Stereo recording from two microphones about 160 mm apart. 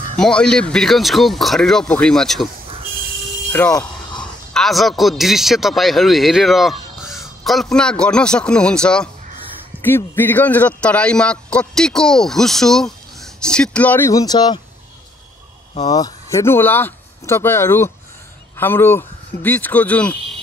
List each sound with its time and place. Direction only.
0.2 s a man's voice: 5° left (ahead or behind)
3.7 s a sound: 30° left (ahead or behind)
4.6 s a man's voice: centre (ahead or behind); by 14.6 s 25° left (ahead or behind)
15.8 s a man's voice: 25° left (ahead or behind)